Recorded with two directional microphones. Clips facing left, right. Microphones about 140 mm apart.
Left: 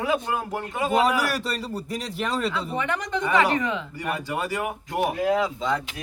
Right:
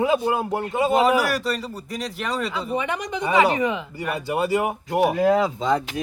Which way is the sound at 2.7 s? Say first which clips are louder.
Right 1 dB; 15° right (ahead or behind).